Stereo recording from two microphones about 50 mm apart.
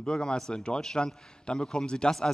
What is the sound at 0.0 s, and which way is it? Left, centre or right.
A man's voice, centre.